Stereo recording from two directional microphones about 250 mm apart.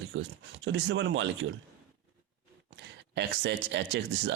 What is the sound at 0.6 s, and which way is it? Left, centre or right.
Speech, right.